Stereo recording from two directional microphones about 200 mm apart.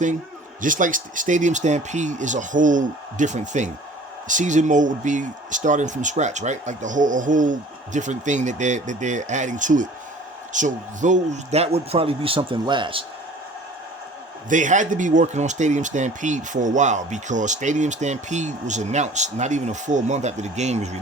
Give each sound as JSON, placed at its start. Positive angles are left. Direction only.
{"t": 0.6, "sound": "speech", "side_deg": -40}
{"t": 14.5, "sound": "speech", "side_deg": -40}